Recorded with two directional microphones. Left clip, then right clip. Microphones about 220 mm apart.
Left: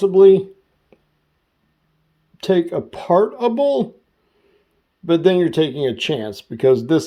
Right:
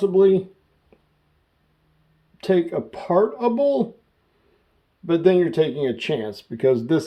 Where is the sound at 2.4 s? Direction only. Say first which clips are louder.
Left 3 dB; 45° left (ahead or behind).